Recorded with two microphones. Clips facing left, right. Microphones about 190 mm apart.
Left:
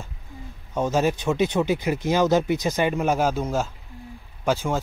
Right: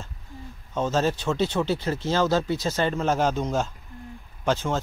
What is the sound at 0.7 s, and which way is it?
Speech, 15° left (ahead or behind).